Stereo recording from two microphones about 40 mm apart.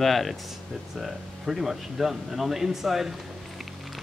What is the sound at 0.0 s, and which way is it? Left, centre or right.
Speech, centre.